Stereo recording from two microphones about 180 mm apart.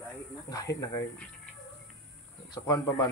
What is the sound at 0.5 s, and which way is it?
Speech, 20° left (ahead or behind).